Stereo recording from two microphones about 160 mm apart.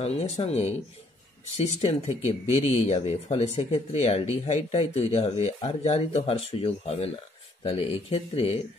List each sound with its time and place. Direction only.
0.0 s speech: 40° left (ahead or behind)